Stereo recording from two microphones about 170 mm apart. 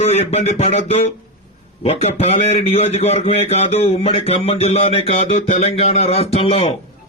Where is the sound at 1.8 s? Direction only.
40° left (ahead or behind).